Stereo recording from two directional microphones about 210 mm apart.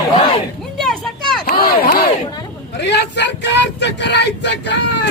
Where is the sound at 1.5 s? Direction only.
50° left (ahead or behind).